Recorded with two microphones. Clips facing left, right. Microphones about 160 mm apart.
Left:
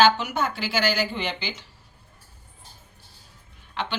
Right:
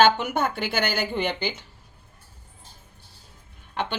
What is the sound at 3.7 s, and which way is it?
Speech, 50° right (ahead or behind).